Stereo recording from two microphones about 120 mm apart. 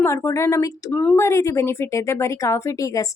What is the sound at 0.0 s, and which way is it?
Speech, 25° left (ahead or behind).